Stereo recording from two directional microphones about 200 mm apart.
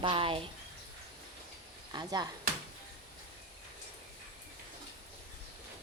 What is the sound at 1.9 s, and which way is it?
Speech, 20° right (ahead or behind).